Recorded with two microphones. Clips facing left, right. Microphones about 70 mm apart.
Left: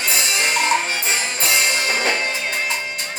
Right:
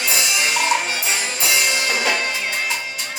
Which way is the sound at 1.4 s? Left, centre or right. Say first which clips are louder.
Even; left.